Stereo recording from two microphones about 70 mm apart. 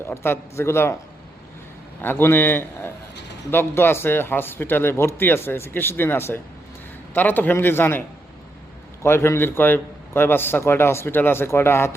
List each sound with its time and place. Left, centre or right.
0.0 s a man's voice: left
2.0 s a man's voice: left